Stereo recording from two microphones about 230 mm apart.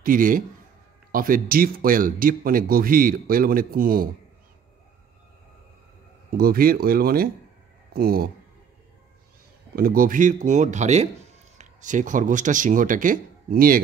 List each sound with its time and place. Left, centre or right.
0.0 s speech: right
6.3 s speech: right
9.8 s speech: right